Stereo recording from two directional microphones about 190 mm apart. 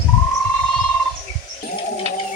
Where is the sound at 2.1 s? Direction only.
35° right (ahead or behind).